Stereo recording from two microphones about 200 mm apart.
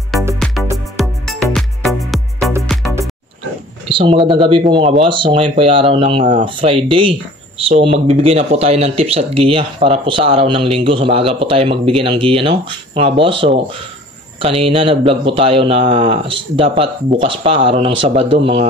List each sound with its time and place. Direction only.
0.1 s music: centre (ahead or behind)
3.9 s speech: 25° right (ahead or behind)